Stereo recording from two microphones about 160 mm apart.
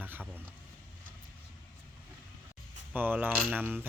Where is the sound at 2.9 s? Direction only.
10° right (ahead or behind).